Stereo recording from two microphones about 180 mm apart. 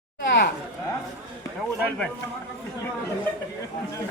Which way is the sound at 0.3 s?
70° left (ahead or behind).